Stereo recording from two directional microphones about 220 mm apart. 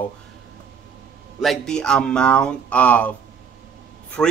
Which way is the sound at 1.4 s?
Centre (ahead or behind).